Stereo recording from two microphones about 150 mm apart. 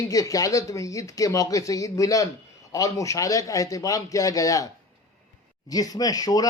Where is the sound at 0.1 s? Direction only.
25° left (ahead or behind).